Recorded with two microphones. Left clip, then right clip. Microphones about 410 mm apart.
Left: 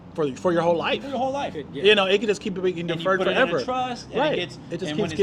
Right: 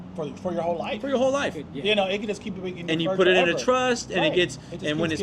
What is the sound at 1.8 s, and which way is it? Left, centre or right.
Speech, left.